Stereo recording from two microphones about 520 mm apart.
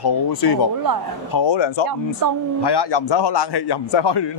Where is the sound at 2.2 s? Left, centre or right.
Right.